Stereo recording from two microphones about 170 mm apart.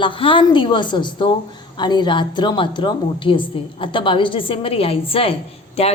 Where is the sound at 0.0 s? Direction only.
30° left (ahead or behind).